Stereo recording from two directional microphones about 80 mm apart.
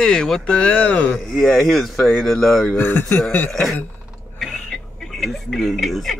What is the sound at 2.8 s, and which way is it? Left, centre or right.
Speech, left.